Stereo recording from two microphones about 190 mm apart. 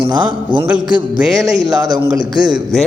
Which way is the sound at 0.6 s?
5° right (ahead or behind).